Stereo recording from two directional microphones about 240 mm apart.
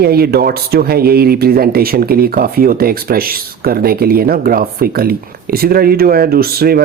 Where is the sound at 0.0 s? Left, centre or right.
Right.